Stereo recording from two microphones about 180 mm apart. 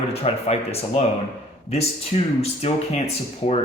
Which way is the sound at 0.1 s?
35° left (ahead or behind).